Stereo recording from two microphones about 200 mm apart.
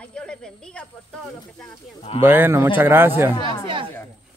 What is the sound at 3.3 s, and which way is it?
Speech, 20° left (ahead or behind).